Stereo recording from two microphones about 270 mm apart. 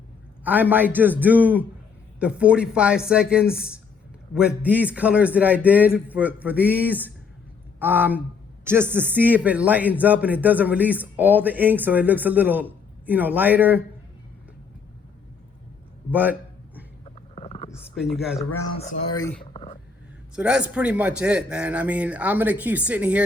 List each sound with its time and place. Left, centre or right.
0.4 s speech: centre
16.1 s a sound: centre
17.3 s vehicle: left
17.9 s speech: centre
18.8 s speech: left
19.5 s a sound: left
20.3 s speech: centre